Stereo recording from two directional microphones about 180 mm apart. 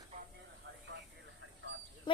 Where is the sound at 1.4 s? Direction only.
90° right.